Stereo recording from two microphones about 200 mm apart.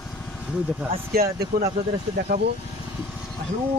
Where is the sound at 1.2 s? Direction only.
55° right (ahead or behind).